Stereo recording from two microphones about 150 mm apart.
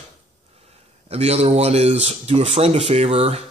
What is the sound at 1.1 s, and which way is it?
Speech, 45° right (ahead or behind).